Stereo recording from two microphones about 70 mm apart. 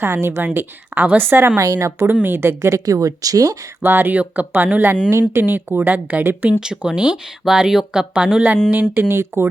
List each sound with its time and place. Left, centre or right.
0.0 s speech: right
1.5 s speech: right
3.8 s speech: right
6.6 s speech: centre
8.7 s speech: right